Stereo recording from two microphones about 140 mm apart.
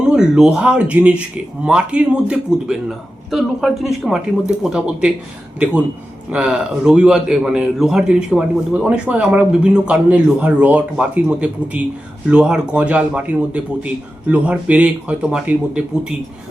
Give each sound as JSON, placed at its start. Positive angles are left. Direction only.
{"t": 0.1, "sound": "a man's voice", "side_deg": -5}
{"t": 6.3, "sound": "a man's voice", "side_deg": -5}